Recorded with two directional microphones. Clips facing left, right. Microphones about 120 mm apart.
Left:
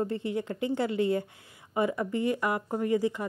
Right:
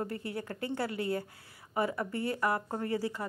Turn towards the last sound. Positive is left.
turn(degrees=20)  # may be behind; listen again after turning